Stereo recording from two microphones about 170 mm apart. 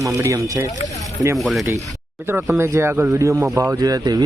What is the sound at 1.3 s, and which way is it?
Speech, centre (ahead or behind).